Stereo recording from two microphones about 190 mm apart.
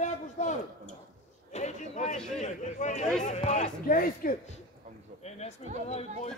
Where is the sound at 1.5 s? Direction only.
35° left (ahead or behind).